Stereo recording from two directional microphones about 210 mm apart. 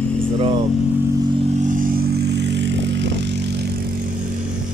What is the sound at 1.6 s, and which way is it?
Vehicle, 40° right (ahead or behind).